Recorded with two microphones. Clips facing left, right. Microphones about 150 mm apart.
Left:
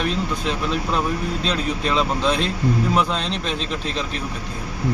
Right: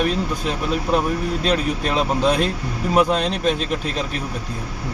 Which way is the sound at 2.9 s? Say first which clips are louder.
Right 9 dB; 10° right (ahead or behind).